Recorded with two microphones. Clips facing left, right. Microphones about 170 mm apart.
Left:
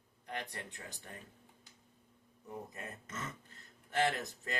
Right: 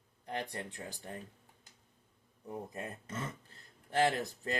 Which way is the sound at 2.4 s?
30° right (ahead or behind).